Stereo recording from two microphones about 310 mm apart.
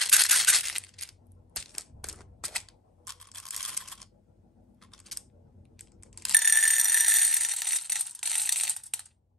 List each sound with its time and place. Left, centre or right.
0.0 s coin: centre
4.7 s a sound: centre
5.8 s ratchet: centre